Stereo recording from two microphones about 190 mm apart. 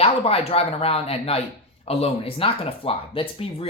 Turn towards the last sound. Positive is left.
turn(degrees=30)  # may be behind; listen again after turning